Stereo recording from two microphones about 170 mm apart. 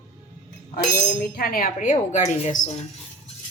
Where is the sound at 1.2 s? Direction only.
60° left (ahead or behind); by 2.7 s 40° left (ahead or behind).